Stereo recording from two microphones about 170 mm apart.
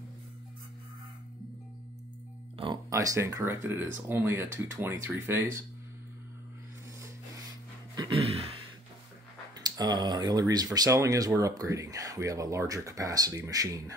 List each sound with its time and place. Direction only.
2.5 s music: 30° right (ahead or behind)
2.9 s speech: 20° right (ahead or behind)
8.2 s a sound: 35° right (ahead or behind)
9.6 s speech: 25° right (ahead or behind)